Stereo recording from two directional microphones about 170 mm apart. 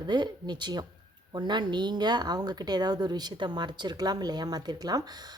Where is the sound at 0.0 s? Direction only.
25° right (ahead or behind).